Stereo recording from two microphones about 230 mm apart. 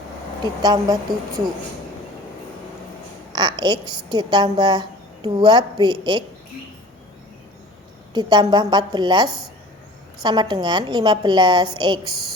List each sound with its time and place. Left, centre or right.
0.4 s speech: centre
3.3 s a woman's voice: centre
8.1 s a woman's voice: centre